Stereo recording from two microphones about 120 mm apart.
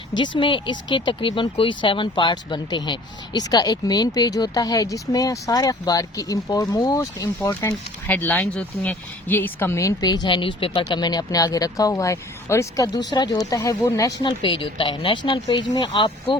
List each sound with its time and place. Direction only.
0.2 s speech: 40° left (ahead or behind); by 7.7 s 25° left (ahead or behind)
7.7 s speech: 15° left (ahead or behind); by 10.8 s 45° left (ahead or behind)
10.8 s speech: 35° left (ahead or behind)
14.3 s speech: 45° left (ahead or behind)